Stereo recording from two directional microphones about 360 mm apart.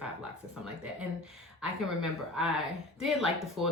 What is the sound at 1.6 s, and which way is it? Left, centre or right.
Speech, centre.